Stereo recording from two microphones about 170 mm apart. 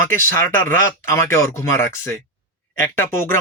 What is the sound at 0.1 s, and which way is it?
Speech, 15° left (ahead or behind).